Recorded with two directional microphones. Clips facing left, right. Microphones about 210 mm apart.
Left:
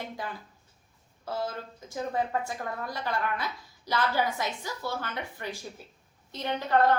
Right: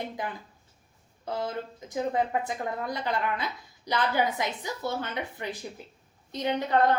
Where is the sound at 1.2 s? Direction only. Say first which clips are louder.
Right 2 dB; 20° right (ahead or behind).